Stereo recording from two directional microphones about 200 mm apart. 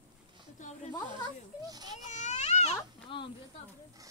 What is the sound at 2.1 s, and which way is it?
Baby cry, 35° left (ahead or behind).